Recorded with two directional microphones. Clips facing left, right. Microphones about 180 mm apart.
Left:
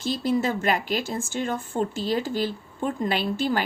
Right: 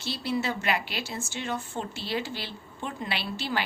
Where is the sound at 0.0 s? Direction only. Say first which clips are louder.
Left 6 dB; 45° left (ahead or behind).